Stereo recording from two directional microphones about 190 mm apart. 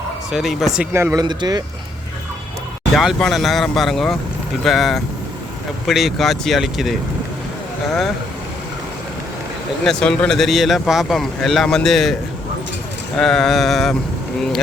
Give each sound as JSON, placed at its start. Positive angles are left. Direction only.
{"t": 0.3, "sound": "speech", "side_deg": 0}
{"t": 0.9, "sound": "speech", "side_deg": -15}
{"t": 2.9, "sound": "speech", "side_deg": 0}
{"t": 9.8, "sound": "speech", "side_deg": 5}
{"t": 13.1, "sound": "speech", "side_deg": 5}